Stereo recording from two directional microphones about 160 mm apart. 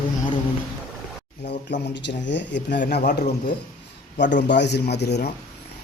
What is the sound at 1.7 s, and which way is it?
Speech, 90° left.